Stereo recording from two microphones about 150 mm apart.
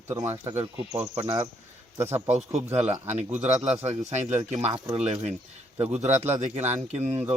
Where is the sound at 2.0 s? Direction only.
15° right (ahead or behind).